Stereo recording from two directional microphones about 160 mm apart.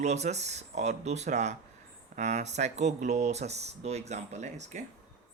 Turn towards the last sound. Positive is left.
turn(degrees=-45)  # may be behind; listen again after turning